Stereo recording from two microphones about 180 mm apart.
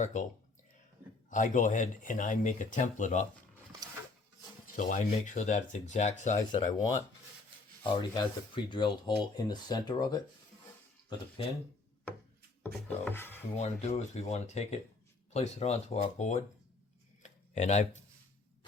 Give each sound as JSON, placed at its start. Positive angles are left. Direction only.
{"t": 0.0, "sound": "speech", "side_deg": 40}
{"t": 1.3, "sound": "speech", "side_deg": 45}
{"t": 4.8, "sound": "speech", "side_deg": 45}
{"t": 7.9, "sound": "speech", "side_deg": 25}
{"t": 11.4, "sound": "speech", "side_deg": 30}
{"t": 12.6, "sound": "speech", "side_deg": 10}
{"t": 13.6, "sound": "speech", "side_deg": 35}
{"t": 17.2, "sound": "a sound", "side_deg": 40}